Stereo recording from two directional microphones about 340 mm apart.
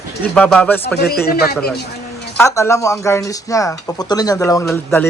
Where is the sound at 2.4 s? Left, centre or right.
Centre.